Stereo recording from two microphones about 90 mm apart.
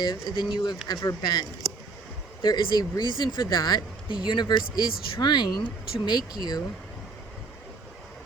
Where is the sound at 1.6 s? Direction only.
45° right (ahead or behind).